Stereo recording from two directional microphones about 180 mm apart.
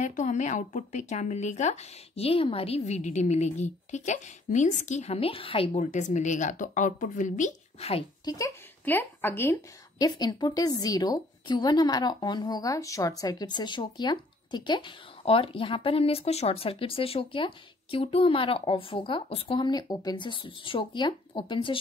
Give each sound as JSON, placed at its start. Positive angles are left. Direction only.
{"t": 0.0, "sound": "speech", "side_deg": 40}
{"t": 8.3, "sound": "a woman's voice", "side_deg": 15}